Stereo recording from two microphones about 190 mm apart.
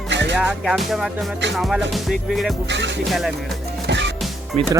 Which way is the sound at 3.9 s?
70° right (ahead or behind).